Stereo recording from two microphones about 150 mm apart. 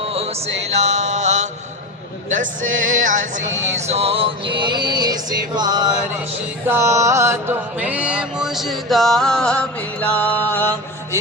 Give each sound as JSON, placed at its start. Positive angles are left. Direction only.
{"t": 0.0, "sound": "mantra", "side_deg": -40}
{"t": 2.3, "sound": "music", "side_deg": -60}
{"t": 6.7, "sound": "mantra", "side_deg": -20}